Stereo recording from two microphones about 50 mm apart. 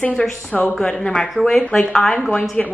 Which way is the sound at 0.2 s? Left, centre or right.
Left.